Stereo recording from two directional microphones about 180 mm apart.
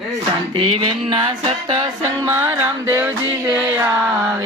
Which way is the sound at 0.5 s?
25° right (ahead or behind).